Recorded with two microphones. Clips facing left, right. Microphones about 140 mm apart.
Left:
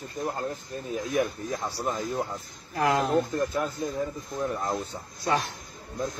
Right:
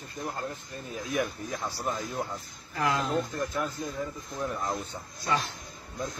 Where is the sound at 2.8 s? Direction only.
60° left (ahead or behind).